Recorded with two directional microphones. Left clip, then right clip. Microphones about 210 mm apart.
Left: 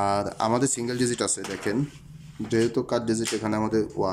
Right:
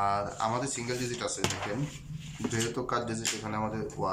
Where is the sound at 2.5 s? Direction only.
25° left (ahead or behind).